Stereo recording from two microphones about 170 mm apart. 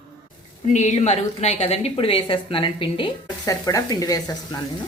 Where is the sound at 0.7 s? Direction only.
45° left (ahead or behind).